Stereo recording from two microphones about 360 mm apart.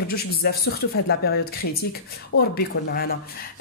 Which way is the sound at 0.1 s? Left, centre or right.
Left.